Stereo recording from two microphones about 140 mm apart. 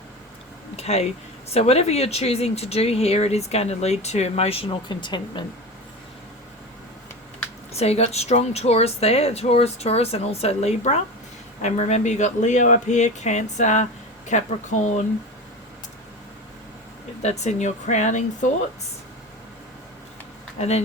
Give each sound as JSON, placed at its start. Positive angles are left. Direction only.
{"t": 0.8, "sound": "speech", "side_deg": 50}
{"t": 7.7, "sound": "speech", "side_deg": 50}
{"t": 17.2, "sound": "speech", "side_deg": 55}
{"t": 20.6, "sound": "speech", "side_deg": 50}